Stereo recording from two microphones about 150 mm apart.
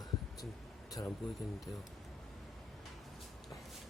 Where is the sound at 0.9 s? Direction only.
25° left (ahead or behind).